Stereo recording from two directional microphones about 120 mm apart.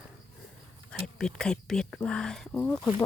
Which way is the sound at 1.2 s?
5° left (ahead or behind).